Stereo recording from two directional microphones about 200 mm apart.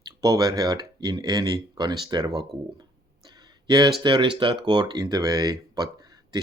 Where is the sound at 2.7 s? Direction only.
20° right (ahead or behind).